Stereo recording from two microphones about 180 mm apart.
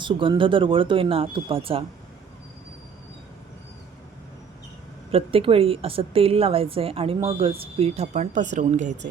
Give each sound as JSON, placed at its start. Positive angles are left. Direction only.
{"t": 0.0, "sound": "speech", "side_deg": -25}
{"t": 5.1, "sound": "a woman's voice", "side_deg": -30}